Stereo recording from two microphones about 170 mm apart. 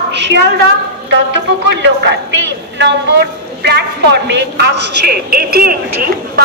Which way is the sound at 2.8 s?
90° right.